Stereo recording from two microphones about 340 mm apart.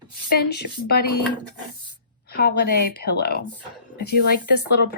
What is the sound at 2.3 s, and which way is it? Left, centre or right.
A woman's voice, left.